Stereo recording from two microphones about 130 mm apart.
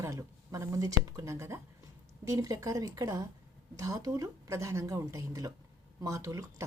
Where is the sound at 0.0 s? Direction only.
25° right (ahead or behind).